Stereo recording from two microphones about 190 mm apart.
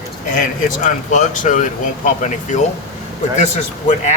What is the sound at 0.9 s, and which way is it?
A man's voice, 40° left (ahead or behind).